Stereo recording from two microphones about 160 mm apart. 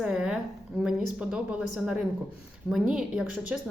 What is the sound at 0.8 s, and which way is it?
A woman's voice, 5° right (ahead or behind).